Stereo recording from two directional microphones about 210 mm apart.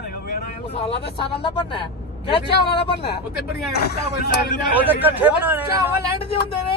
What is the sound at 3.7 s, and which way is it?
Speech, 50° left (ahead or behind).